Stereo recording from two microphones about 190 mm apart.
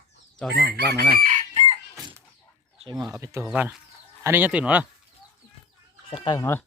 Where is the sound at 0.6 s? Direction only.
55° right (ahead or behind).